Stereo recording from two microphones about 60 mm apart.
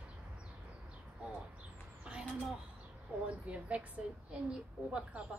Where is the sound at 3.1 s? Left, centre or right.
Right.